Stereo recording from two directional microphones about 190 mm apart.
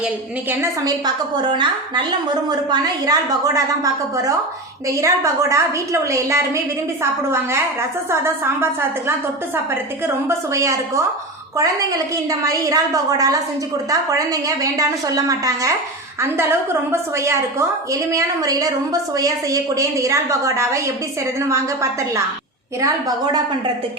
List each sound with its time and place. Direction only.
0.6 s a woman's voice: 20° right (ahead or behind)
10.1 s a woman's voice: 15° right (ahead or behind)